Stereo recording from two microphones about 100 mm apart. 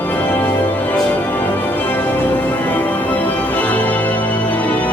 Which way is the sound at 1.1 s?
20° left (ahead or behind).